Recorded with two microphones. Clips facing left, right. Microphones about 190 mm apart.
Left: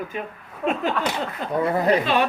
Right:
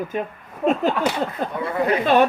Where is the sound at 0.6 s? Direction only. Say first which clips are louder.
Right 4 dB; 40° right (ahead or behind).